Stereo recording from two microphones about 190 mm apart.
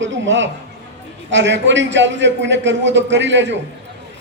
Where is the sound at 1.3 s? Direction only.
70° right (ahead or behind).